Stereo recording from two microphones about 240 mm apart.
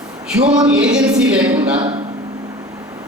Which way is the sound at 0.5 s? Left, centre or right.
Centre.